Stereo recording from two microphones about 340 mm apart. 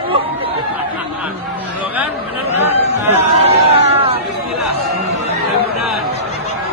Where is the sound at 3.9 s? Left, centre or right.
Centre.